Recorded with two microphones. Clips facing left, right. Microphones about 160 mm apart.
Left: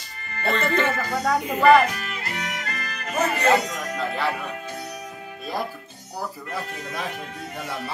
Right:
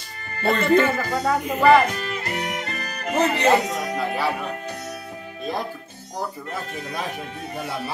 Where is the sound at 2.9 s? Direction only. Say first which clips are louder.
Right 3 dB; 25° right (ahead or behind).